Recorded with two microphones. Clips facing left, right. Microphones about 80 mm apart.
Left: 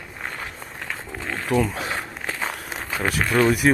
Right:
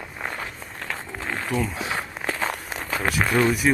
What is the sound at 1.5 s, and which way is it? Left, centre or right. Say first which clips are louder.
Speech: left 5 dB; centre.